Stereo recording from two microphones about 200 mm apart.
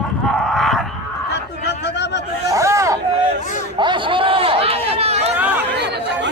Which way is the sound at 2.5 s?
15° right (ahead or behind).